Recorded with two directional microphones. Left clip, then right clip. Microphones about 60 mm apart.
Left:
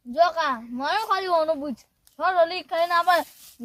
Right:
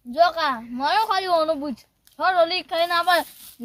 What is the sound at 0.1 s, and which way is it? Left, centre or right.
A woman's voice, left.